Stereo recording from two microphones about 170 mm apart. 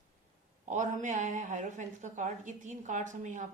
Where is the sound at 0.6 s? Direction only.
45° right (ahead or behind).